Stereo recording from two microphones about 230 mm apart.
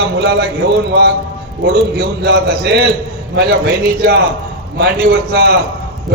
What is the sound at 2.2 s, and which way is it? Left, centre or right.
A man's voice, right.